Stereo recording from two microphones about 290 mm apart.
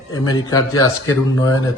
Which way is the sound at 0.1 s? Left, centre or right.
Centre.